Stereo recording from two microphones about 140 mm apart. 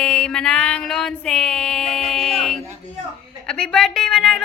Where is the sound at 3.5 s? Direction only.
5° left (ahead or behind).